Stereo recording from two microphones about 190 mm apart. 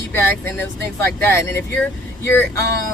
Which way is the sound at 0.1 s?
10° left (ahead or behind).